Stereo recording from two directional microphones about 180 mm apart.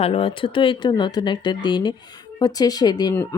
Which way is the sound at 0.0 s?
30° left (ahead or behind).